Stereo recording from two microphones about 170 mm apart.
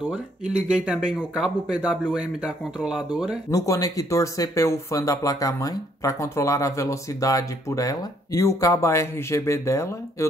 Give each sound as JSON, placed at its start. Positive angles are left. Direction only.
{"t": 0.1, "sound": "speech", "side_deg": -5}
{"t": 3.4, "sound": "speech", "side_deg": 20}